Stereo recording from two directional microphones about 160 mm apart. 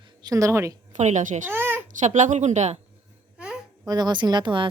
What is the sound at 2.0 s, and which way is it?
Speech, 50° right (ahead or behind).